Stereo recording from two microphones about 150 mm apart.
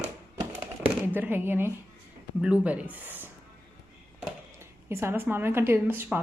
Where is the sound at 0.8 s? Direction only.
10° right (ahead or behind).